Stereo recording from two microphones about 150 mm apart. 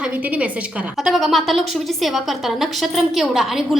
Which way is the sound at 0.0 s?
10° right (ahead or behind).